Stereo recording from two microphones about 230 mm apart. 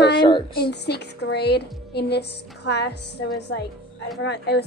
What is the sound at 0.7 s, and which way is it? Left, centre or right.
A woman's voice, left.